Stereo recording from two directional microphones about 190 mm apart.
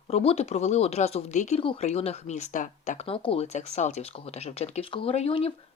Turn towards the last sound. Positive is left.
turn(degrees=30)  # may be behind; listen again after turning